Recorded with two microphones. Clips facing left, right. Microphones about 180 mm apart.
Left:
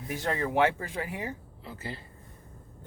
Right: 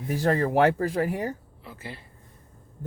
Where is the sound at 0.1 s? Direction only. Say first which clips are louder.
Right 6 dB; 35° right (ahead or behind).